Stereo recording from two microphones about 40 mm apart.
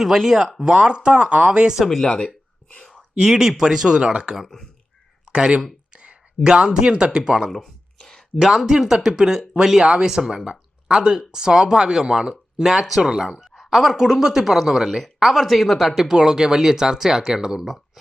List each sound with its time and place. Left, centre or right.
0.6 s speech: right
1.8 s speech: centre
2.0 s speech: centre
3.2 s speech: centre
4.4 s speech: centre
5.9 s a sound: right
6.5 s speech: centre
13.4 s speech: centre
16.0 s speech: centre